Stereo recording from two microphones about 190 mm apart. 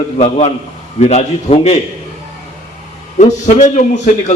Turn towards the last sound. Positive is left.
turn(degrees=40)  # may be behind; listen again after turning